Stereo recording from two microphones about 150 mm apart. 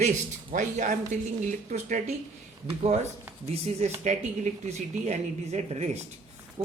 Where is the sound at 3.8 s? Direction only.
50° right (ahead or behind).